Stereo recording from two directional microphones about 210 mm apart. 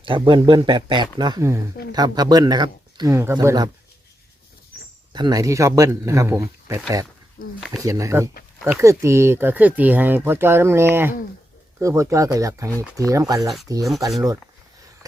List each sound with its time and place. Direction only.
0.0 s speech: 25° right (ahead or behind)
4.7 s a sound: 50° left (ahead or behind)
5.1 s speech: 20° right (ahead or behind)
7.4 s speech: 40° left (ahead or behind)
7.8 s speech: 15° right (ahead or behind)